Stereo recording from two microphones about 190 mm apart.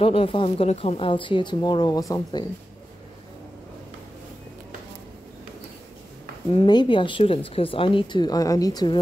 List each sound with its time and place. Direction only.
0.0 s speech: 30° left (ahead or behind)
6.5 s speech: 25° left (ahead or behind)